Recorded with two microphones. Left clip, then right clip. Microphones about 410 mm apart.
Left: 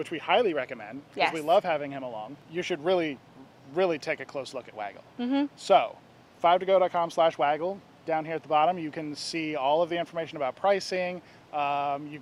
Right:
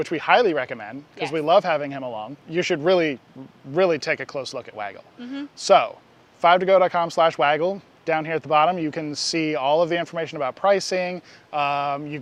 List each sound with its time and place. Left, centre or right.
0.0 s speech: right
5.2 s speech: left
5.6 s speech: right